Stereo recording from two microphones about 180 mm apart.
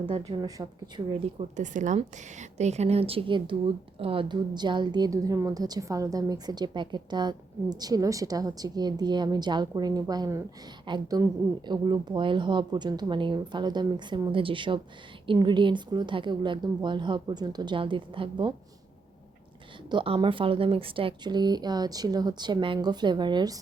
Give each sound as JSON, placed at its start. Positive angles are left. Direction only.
{"t": 0.0, "sound": "a woman's voice", "side_deg": -25}
{"t": 1.4, "sound": "a woman's voice", "side_deg": -40}
{"t": 19.9, "sound": "a woman's voice", "side_deg": -25}